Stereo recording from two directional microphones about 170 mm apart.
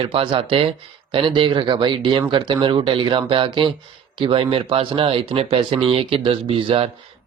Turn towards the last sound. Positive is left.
turn(degrees=-30)  # may be behind; listen again after turning